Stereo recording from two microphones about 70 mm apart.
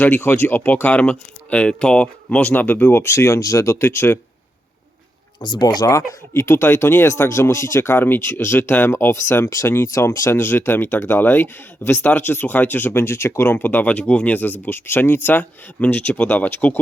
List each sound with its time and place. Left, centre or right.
0.3 s speech: left
5.4 s speech: left